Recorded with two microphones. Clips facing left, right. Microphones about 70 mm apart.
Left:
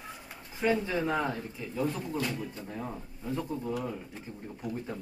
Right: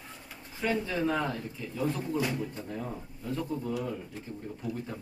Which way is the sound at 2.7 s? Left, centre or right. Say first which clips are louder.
Right 1 dB; centre.